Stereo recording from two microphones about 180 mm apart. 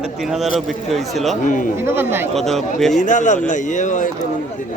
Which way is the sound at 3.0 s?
45° left (ahead or behind).